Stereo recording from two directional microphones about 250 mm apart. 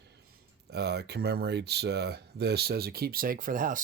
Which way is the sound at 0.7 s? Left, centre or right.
Right.